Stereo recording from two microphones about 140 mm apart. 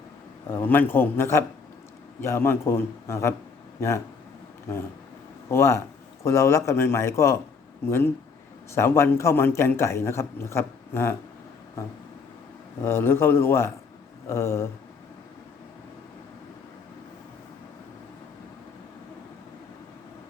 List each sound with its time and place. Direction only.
0.5 s a man's voice: 15° left (ahead or behind)
5.5 s a man's voice: 20° left (ahead or behind)
12.8 s a man's voice: 15° left (ahead or behind)